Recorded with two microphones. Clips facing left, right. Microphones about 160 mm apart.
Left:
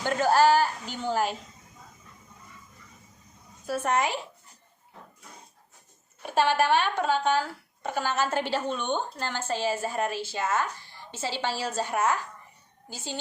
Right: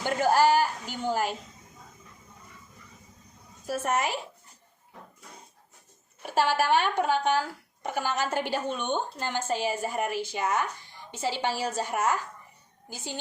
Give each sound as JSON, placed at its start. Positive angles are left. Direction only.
{"t": 0.0, "sound": "a sound", "side_deg": -15}
{"t": 3.8, "sound": "speech", "side_deg": -5}
{"t": 6.2, "sound": "a woman's voice", "side_deg": -10}